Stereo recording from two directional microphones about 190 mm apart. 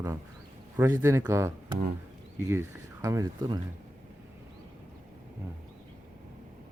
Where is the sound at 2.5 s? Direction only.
15° right (ahead or behind).